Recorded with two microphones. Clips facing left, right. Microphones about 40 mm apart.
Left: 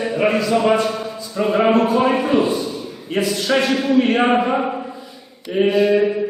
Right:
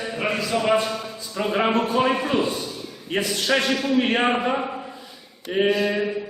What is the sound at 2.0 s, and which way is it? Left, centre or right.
Speech, centre.